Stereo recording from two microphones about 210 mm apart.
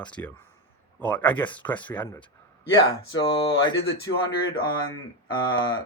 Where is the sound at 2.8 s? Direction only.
25° left (ahead or behind).